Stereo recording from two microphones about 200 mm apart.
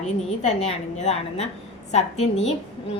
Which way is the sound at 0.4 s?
35° left (ahead or behind).